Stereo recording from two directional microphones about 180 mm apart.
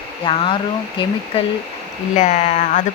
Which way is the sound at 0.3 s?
30° left (ahead or behind).